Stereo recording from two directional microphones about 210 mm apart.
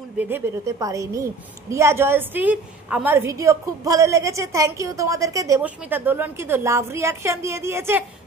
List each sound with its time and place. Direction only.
0.2 s a woman's voice: 10° right (ahead or behind)